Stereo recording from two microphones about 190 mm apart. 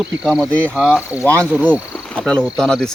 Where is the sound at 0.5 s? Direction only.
5° left (ahead or behind).